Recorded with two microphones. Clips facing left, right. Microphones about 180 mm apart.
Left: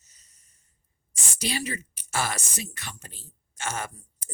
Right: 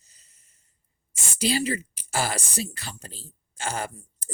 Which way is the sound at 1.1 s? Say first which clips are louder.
Right 6 dB; 30° right (ahead or behind).